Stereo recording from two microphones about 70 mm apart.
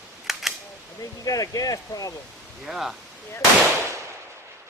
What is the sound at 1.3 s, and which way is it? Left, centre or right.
Speech, left.